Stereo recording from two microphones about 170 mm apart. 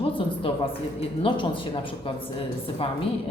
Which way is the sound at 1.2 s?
30° left (ahead or behind).